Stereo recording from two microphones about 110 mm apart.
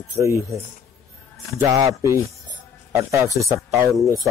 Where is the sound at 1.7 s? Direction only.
30° right (ahead or behind).